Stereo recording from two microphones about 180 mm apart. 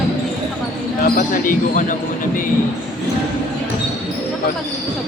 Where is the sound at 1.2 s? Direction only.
45° left (ahead or behind).